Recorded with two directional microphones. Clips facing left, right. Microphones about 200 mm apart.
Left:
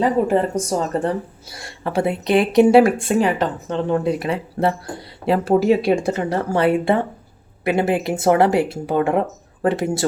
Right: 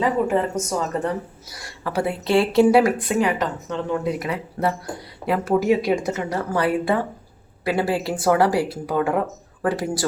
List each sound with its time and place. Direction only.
0.0 s speech: 35° left (ahead or behind)